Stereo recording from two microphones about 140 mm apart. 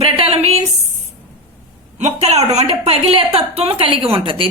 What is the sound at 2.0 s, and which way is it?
A woman's voice, 50° right (ahead or behind).